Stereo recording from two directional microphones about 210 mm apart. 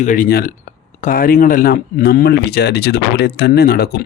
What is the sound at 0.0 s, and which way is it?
Speech, 40° left (ahead or behind).